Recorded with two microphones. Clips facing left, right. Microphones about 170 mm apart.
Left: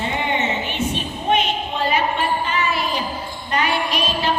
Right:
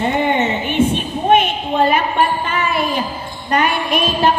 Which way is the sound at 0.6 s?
55° right (ahead or behind).